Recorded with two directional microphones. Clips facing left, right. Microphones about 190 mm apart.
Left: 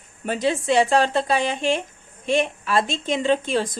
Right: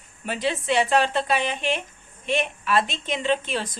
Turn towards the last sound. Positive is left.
turn(degrees=45)  # may be behind; listen again after turning